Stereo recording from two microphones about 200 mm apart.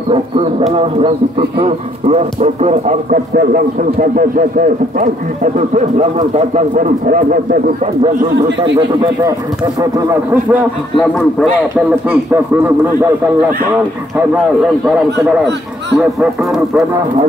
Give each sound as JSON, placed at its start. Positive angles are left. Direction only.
{"t": 0.1, "sound": "speech", "side_deg": -25}
{"t": 9.8, "sound": "speech", "side_deg": -15}
{"t": 16.2, "sound": "speech", "side_deg": 0}